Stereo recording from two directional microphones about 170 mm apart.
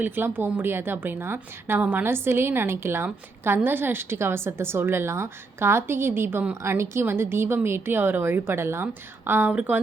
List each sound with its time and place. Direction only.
0.0 s a woman's voice: 10° right (ahead or behind)